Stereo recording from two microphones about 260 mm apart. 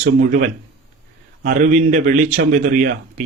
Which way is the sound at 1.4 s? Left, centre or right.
Right.